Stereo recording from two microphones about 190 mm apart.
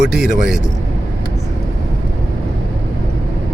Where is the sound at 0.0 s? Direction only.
5° right (ahead or behind).